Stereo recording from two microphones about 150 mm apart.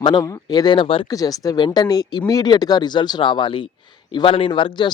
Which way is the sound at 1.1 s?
25° left (ahead or behind).